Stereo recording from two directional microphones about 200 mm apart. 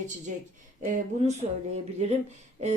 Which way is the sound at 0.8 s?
35° right (ahead or behind).